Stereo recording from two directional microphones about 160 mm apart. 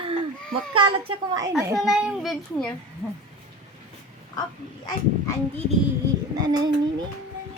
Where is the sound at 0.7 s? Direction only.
30° right (ahead or behind).